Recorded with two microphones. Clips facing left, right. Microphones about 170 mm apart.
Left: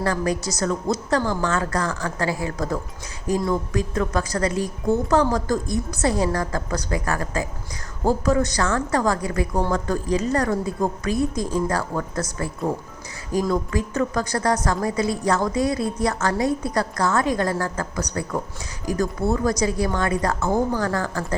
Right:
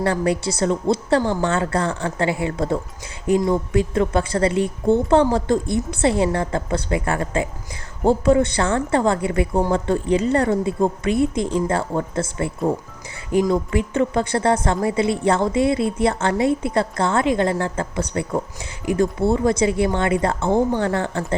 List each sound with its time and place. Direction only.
0.0 s a woman's voice: 30° right (ahead or behind)